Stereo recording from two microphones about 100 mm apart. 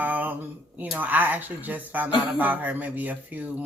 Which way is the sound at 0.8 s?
15° right (ahead or behind).